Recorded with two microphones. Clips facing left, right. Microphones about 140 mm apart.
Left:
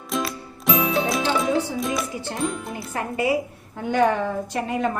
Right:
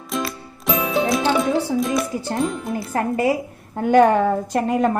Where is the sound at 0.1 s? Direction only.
Centre (ahead or behind).